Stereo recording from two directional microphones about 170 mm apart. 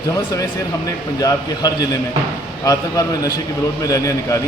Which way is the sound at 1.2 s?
20° left (ahead or behind).